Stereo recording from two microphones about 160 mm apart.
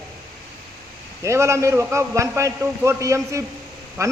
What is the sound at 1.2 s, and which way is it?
A man's voice, 20° right (ahead or behind).